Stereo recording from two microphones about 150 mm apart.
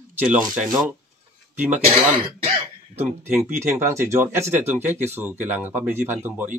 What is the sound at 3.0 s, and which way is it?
Speech, 15° right (ahead or behind).